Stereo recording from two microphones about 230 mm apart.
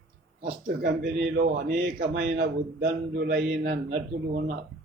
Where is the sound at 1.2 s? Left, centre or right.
Right.